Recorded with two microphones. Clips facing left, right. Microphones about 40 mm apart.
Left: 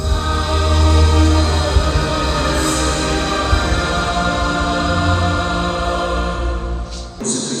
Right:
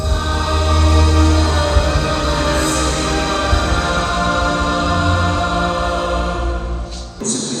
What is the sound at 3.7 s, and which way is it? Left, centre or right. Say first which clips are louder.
Music: right 1 dB; right.